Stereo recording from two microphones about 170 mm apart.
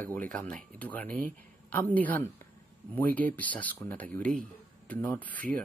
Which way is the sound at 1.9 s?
10° left (ahead or behind).